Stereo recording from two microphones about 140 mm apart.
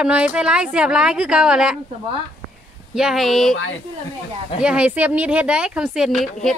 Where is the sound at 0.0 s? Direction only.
10° right (ahead or behind).